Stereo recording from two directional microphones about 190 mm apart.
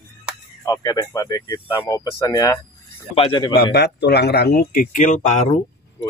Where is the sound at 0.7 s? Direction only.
20° left (ahead or behind).